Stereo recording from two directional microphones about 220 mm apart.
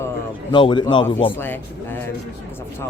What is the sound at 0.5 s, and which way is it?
Speech, 20° left (ahead or behind).